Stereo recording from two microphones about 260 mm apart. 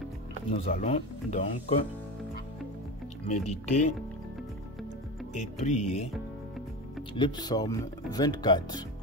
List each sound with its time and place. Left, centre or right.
0.6 s speech: left
3.4 s speech: left
5.3 s speech: left
7.2 s speech: centre